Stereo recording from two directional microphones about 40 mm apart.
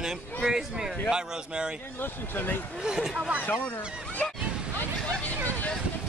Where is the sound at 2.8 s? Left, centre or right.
Centre.